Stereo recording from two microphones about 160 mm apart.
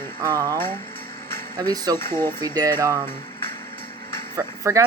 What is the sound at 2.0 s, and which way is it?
Speech, 15° left (ahead or behind).